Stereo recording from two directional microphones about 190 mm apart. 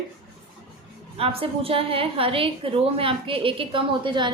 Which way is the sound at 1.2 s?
30° right (ahead or behind).